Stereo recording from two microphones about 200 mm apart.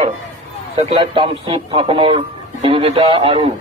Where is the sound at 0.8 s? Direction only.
25° right (ahead or behind).